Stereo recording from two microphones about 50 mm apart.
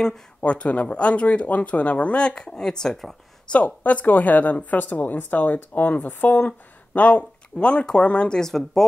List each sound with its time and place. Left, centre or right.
0.4 s speech: left; by 3.2 s centre
3.5 s a woman's voice: left
8.4 s speech: centre